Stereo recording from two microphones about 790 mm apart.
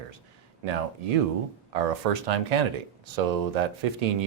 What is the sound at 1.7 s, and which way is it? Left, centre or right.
Speech, right.